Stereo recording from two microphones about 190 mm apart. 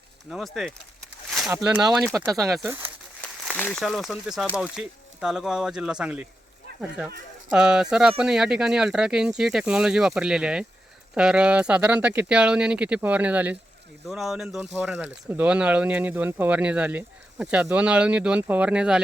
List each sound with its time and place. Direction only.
0.3 s speech: centre (ahead or behind)
2.1 s speech: 15° right (ahead or behind)
3.4 s speech: 10° left (ahead or behind)
7.5 s speech: 5° right (ahead or behind)